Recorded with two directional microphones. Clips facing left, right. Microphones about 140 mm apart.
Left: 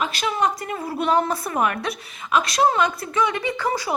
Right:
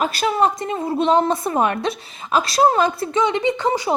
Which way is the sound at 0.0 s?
40° right (ahead or behind).